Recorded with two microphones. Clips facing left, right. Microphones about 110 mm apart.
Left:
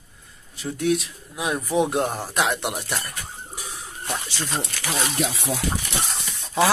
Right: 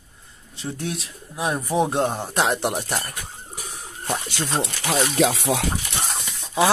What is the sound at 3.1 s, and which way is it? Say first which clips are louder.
Wild animals: even; 50° right (ahead or behind).